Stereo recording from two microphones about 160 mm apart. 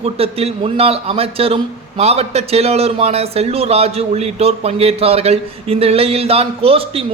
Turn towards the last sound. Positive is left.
turn(degrees=-40)  # may be behind; listen again after turning